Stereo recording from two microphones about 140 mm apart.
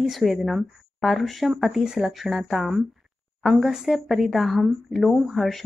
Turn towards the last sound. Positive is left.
turn(degrees=0)  # may be behind; listen again after turning